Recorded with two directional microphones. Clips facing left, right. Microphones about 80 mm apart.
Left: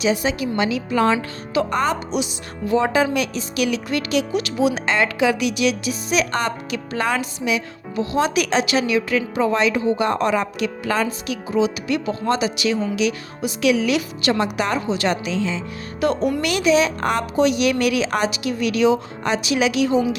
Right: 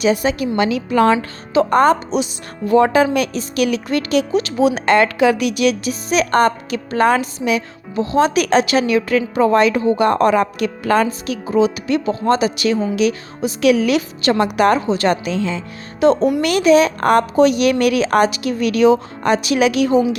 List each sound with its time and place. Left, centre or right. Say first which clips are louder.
0.0 s a woman's voice: right 4 dB; right
1.1 s speech: right 5 dB; right
4.9 s speech: right 6 dB; right
16.0 s speech: right 6 dB; right
16.4 s speech: right 4 dB; right